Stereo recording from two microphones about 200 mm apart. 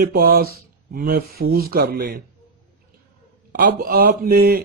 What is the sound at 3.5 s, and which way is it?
A man's voice, 45° right (ahead or behind).